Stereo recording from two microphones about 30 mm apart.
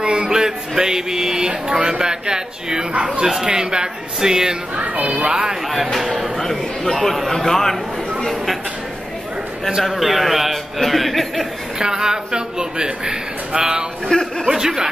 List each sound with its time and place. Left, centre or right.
0.0 s music: right
0.3 s speech: right
5.0 s speech: right
5.3 s speech: right
6.3 s a man's voice: centre
9.8 s speech: centre
11.8 s speech: right
14.1 s a man's voice: left
14.5 s speech: centre